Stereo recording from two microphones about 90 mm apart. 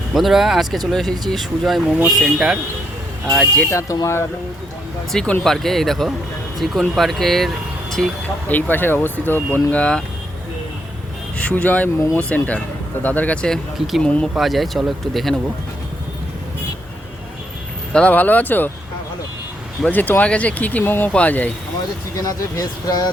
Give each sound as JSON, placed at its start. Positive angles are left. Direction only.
{"t": 0.1, "sound": "speech", "side_deg": 0}
{"t": 3.7, "sound": "speech", "side_deg": 35}
{"t": 5.1, "sound": "speech", "side_deg": 10}
{"t": 8.4, "sound": "speech", "side_deg": 20}
{"t": 11.3, "sound": "speech", "side_deg": 15}
{"t": 13.7, "sound": "speech", "side_deg": 0}
{"t": 14.0, "sound": "speech", "side_deg": 10}
{"t": 14.3, "sound": "speech", "side_deg": 0}
{"t": 17.9, "sound": "speech", "side_deg": 15}
{"t": 19.9, "sound": "speech", "side_deg": 20}
{"t": 22.1, "sound": "speech", "side_deg": 40}